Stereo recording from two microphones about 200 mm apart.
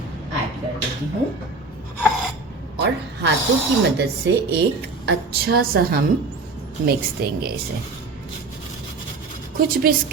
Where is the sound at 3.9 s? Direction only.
55° right (ahead or behind).